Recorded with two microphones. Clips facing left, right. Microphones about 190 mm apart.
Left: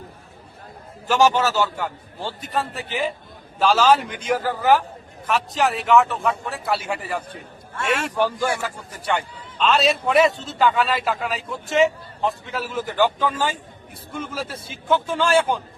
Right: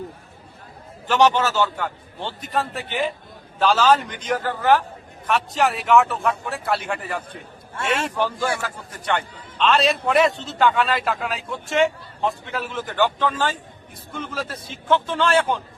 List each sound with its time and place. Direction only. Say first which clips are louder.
1.0 s a man's voice: even; 10° left (ahead or behind)
7.8 s a man's voice: even; 35° right (ahead or behind)
8.2 s a man's voice: left 2 dB; 10° left (ahead or behind)